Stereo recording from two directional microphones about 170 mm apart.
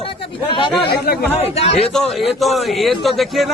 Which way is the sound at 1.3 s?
35° left (ahead or behind).